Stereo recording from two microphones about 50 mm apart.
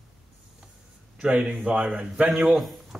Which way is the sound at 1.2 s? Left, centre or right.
Right.